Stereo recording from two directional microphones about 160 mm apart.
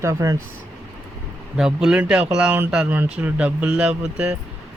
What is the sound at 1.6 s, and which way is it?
A man's voice, 5° right (ahead or behind).